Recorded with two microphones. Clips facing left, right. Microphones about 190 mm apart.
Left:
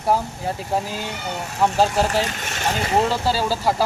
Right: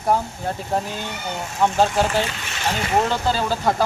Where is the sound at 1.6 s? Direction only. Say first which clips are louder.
Even; centre (ahead or behind).